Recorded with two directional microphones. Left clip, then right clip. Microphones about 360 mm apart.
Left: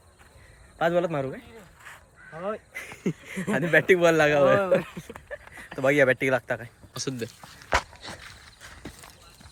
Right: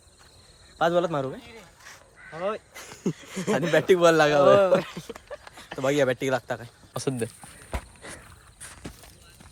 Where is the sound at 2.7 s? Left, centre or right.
Centre.